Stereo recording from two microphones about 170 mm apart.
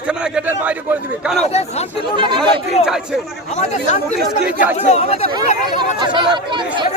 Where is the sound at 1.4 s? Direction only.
40° left (ahead or behind).